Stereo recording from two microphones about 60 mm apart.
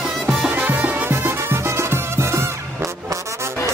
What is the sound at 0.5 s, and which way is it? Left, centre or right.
Music, right.